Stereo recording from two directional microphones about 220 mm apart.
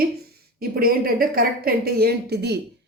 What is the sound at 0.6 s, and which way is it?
A woman's voice, 45° right (ahead or behind).